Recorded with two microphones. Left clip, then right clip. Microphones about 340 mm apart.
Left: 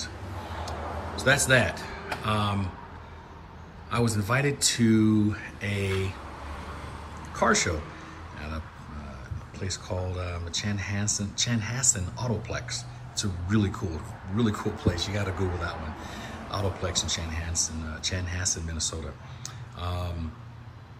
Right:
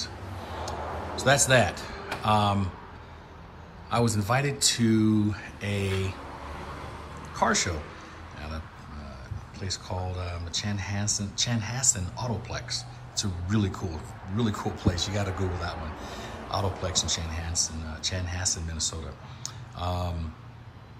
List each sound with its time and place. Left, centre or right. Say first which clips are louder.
0.7 s a sound: right 2 dB; centre
3.9 s a man's voice: right 1 dB; centre
7.3 s speech: left 1 dB; centre
9.6 s a man's voice: left 1 dB; centre